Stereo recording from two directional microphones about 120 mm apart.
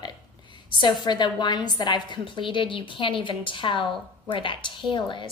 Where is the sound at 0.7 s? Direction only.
35° left (ahead or behind).